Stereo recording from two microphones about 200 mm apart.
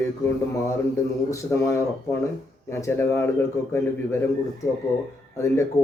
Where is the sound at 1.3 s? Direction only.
15° left (ahead or behind).